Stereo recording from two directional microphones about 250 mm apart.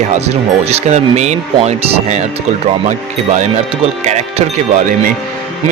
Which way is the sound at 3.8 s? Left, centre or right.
Right.